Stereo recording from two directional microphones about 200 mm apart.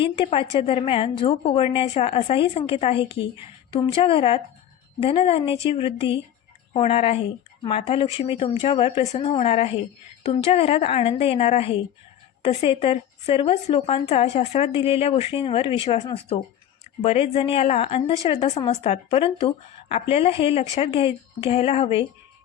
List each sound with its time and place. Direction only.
0.0 s speech: 25° left (ahead or behind)